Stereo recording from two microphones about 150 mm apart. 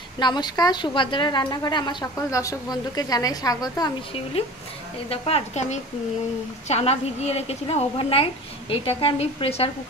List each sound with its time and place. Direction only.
0.2 s a woman's voice: 30° left (ahead or behind)
5.1 s a woman's voice: 40° left (ahead or behind)